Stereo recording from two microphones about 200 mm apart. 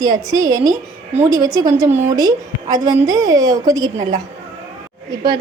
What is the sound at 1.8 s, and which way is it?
Speech, 35° right (ahead or behind).